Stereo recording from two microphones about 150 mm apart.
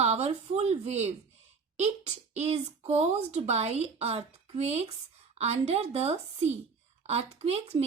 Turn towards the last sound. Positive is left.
turn(degrees=-45)  # may be behind; listen again after turning